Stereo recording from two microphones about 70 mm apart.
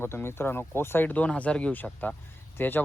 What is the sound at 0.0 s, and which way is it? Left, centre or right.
Speech, left.